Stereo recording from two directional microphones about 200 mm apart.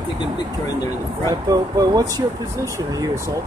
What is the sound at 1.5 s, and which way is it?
Speech, 20° right (ahead or behind).